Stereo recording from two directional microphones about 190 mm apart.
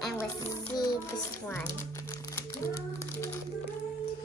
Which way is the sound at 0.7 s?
20° left (ahead or behind).